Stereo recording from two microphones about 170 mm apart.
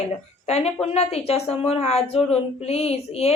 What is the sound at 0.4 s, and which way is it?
Speech, 40° left (ahead or behind).